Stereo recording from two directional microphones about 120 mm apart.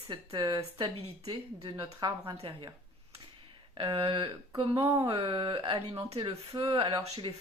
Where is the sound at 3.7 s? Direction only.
45° right (ahead or behind).